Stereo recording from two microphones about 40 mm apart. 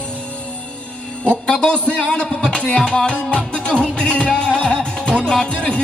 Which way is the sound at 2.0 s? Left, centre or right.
Centre.